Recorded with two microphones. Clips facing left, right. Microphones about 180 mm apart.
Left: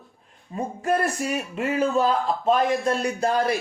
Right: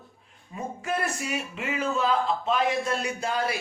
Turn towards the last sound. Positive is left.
turn(degrees=45)  # may be behind; listen again after turning